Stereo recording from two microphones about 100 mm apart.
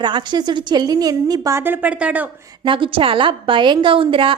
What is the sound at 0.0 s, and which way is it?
A woman's voice, 50° right (ahead or behind).